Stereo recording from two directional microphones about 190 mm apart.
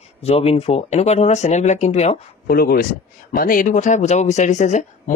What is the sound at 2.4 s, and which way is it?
Speech, 55° left (ahead or behind).